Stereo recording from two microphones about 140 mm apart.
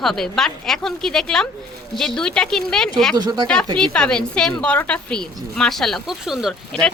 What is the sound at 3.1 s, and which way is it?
Speech, 30° right (ahead or behind).